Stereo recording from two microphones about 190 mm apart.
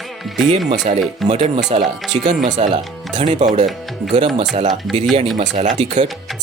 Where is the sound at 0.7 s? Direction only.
35° right (ahead or behind).